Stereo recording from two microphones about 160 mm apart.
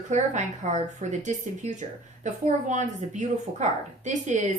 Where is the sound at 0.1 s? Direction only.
50° right (ahead or behind).